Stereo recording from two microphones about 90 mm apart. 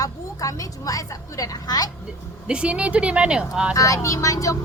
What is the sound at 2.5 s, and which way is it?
Speech, 10° right (ahead or behind).